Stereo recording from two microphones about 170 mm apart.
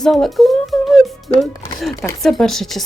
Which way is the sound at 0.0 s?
Centre (ahead or behind).